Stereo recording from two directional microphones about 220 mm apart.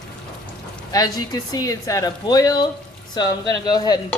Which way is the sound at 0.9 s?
15° left (ahead or behind).